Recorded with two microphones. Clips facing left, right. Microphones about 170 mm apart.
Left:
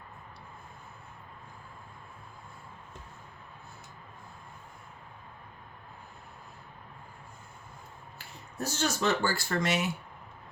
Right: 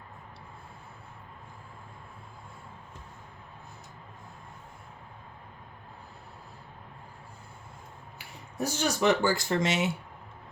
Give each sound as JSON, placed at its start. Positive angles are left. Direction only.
{"t": 8.5, "sound": "speech", "side_deg": -10}